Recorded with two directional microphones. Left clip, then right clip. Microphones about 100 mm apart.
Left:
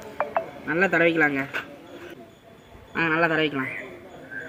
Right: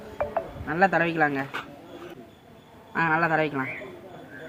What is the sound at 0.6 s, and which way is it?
Speech, 35° right (ahead or behind).